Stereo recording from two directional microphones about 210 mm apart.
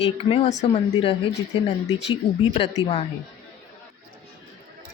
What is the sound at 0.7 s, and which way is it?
Speech, 30° left (ahead or behind).